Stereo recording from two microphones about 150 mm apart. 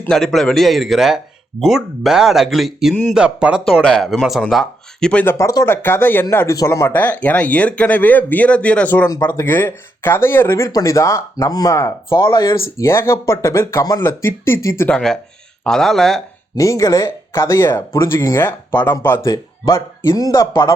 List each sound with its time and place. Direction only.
0.1 s speech: centre (ahead or behind); by 12.5 s 30° left (ahead or behind)
12.7 s speech: 20° left (ahead or behind)
14.9 s speech: 5° left (ahead or behind)
16.6 s speech: 20° left (ahead or behind)